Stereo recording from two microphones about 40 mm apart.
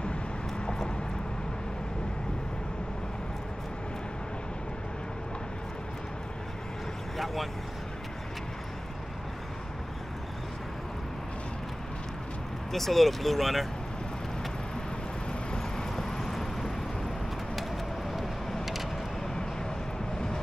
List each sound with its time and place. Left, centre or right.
0.7 s vehicle: left
12.7 s speech: centre
15.5 s vehicle: centre
18.1 s vehicle: centre